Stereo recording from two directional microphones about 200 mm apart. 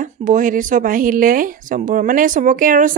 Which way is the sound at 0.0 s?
40° right (ahead or behind).